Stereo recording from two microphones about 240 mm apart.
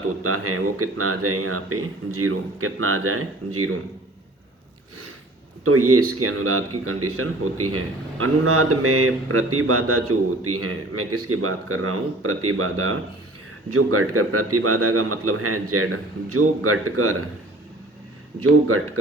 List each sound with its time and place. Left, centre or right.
0.2 s speech: right
5.6 s speech: right
18.7 s speech: right